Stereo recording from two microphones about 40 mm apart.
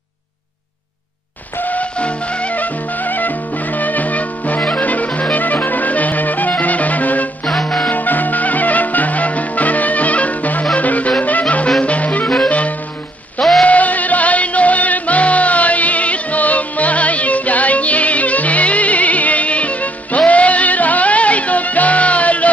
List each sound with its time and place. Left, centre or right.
1.6 s music: left
2.5 s music: left
13.4 s a sound: centre
13.7 s music: left